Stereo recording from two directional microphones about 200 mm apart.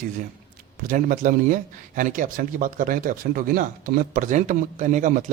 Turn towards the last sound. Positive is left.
turn(degrees=-40)  # may be behind; listen again after turning